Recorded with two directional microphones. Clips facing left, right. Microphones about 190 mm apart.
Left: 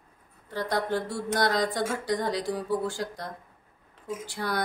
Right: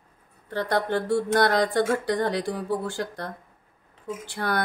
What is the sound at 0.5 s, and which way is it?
Speech, 60° right (ahead or behind).